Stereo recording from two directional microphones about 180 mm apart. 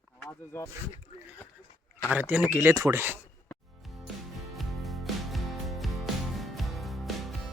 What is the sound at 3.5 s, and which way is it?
Music, centre (ahead or behind).